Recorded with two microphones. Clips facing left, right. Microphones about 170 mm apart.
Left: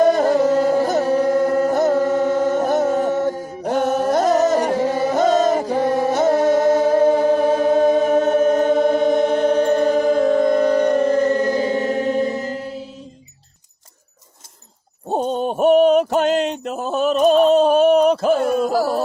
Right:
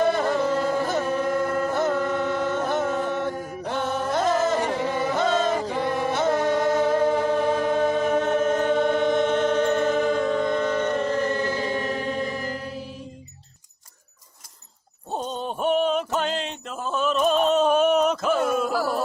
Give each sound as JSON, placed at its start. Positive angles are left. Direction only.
{"t": 0.0, "sound": "music", "side_deg": 40}
{"t": 11.7, "sound": "choir", "side_deg": 25}
{"t": 15.1, "sound": "a sound", "side_deg": 55}